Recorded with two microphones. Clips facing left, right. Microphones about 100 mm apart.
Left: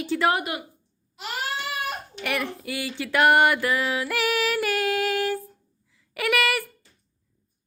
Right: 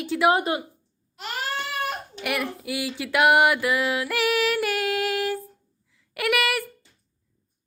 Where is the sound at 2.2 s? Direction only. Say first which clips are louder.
Right 1 dB; 5° right (ahead or behind).